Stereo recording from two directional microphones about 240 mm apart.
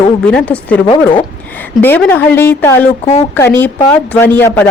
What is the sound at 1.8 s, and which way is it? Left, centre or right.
A woman's voice, centre.